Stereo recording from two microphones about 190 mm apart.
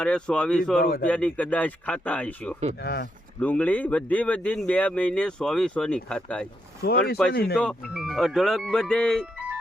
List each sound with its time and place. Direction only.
0.0 s speech: 5° left (ahead or behind)
2.8 s speech: 55° left (ahead or behind)
3.4 s speech: 10° left (ahead or behind)